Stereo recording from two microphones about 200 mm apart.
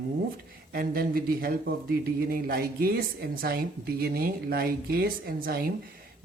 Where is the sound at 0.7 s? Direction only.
50° right (ahead or behind).